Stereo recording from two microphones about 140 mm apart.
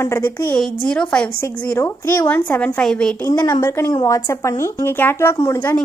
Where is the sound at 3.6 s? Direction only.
20° left (ahead or behind).